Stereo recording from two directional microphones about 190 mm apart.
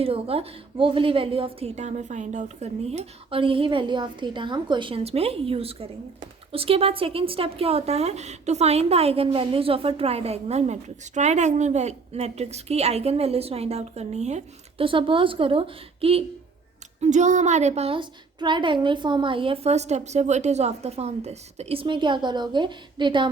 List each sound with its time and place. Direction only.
0.0 s a woman's voice: 30° right (ahead or behind)